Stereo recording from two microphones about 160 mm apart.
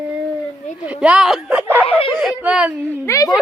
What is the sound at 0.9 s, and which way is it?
Speech, 5° right (ahead or behind).